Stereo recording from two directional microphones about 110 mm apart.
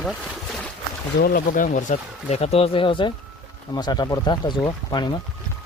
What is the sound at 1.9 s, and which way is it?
Speech, 90° left.